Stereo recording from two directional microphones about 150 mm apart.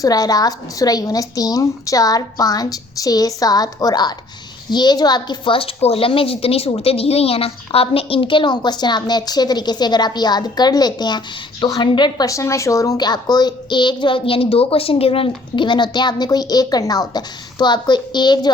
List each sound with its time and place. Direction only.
0.0 s a woman's voice: 25° left (ahead or behind)